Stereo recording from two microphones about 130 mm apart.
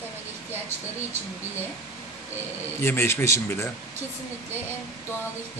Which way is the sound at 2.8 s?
20° left (ahead or behind).